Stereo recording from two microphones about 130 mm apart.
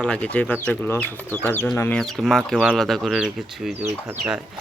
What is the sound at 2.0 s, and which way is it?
Speech, centre (ahead or behind).